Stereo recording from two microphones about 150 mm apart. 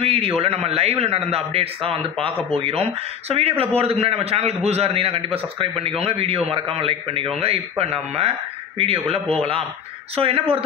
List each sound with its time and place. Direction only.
0.0 s a man's voice: 40° right (ahead or behind)